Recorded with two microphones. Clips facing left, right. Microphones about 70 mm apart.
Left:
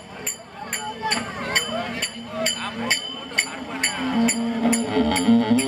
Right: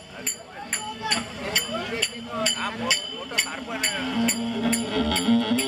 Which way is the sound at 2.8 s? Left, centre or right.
Left.